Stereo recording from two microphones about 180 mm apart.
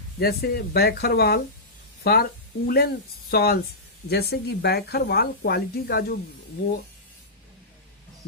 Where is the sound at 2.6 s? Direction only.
60° left (ahead or behind).